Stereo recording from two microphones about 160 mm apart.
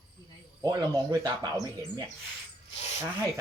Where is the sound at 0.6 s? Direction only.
25° right (ahead or behind).